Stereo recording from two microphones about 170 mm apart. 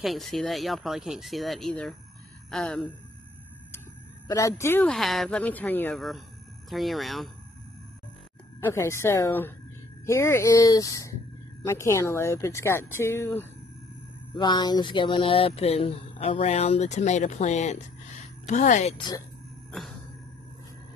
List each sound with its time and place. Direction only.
0.0 s speech: centre (ahead or behind)
4.3 s speech: 20° left (ahead or behind)
4.8 s speech: centre (ahead or behind)
8.5 s speech: 15° left (ahead or behind)
14.3 s a sound: 25° left (ahead or behind); by 18.9 s 45° left (ahead or behind)
18.9 s speech: 25° left (ahead or behind)